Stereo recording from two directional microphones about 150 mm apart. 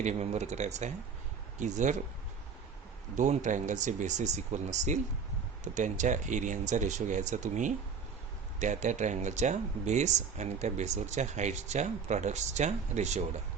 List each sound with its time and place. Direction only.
0.0 s speech: 50° right (ahead or behind)
3.2 s speech: 55° right (ahead or behind)